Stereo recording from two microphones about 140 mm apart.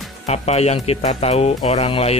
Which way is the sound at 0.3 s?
50° left (ahead or behind).